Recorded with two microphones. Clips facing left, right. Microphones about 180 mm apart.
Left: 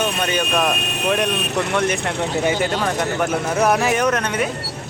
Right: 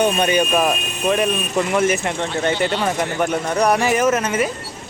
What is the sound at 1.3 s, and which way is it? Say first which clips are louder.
Speech: right 1 dB; 70° left (ahead or behind).